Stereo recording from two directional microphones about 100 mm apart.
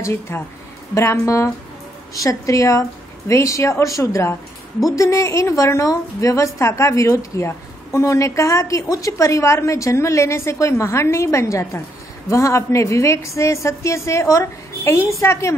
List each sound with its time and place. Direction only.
0.0 s a woman's voice: 25° left (ahead or behind)